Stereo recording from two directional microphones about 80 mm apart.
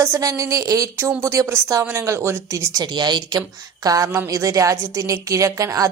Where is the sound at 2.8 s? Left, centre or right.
Right.